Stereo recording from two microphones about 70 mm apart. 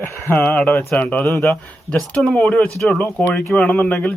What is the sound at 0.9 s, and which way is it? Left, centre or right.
Speech, centre.